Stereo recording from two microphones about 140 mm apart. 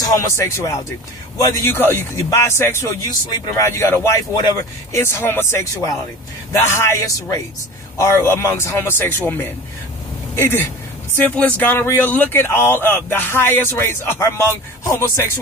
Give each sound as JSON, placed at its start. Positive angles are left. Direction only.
{"t": 0.0, "sound": "speech", "side_deg": 25}